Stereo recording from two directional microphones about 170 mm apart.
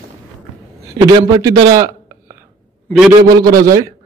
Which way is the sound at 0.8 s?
20° right (ahead or behind).